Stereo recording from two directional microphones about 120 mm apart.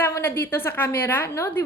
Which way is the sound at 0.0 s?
20° left (ahead or behind).